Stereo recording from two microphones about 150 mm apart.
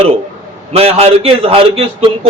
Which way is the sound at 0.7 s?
40° right (ahead or behind).